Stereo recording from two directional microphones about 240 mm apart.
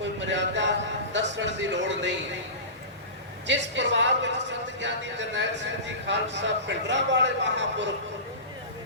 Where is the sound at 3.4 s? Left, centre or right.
Right.